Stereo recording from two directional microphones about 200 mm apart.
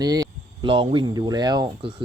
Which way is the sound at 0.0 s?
20° right (ahead or behind).